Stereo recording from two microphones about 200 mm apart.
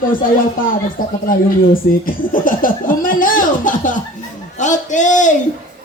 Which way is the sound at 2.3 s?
45° left (ahead or behind).